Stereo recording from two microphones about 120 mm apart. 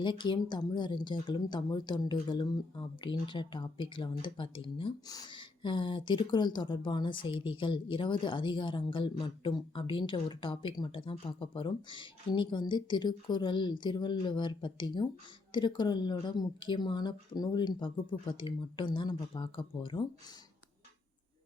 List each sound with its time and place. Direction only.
0.0 s speech: 40° left (ahead or behind)